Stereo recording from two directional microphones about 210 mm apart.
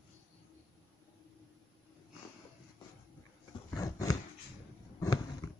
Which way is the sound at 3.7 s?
15° left (ahead or behind).